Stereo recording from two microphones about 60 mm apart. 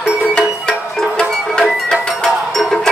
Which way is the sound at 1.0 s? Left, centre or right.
Centre.